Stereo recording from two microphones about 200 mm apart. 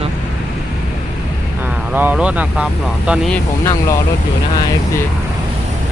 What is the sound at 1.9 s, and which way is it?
Speech, 5° right (ahead or behind).